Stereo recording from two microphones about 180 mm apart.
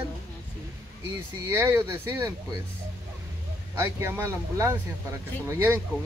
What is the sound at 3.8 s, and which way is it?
Speech, 15° right (ahead or behind).